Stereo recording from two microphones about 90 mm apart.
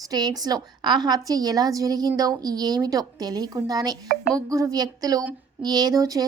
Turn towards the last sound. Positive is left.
turn(degrees=-40)  # may be behind; listen again after turning